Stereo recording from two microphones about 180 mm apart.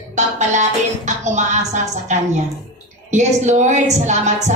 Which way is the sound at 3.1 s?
40° right (ahead or behind).